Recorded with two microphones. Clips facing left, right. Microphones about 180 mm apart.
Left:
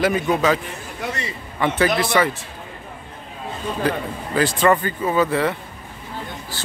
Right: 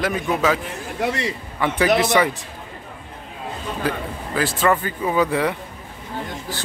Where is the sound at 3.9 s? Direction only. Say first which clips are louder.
Left 1 dB; 5° right (ahead or behind).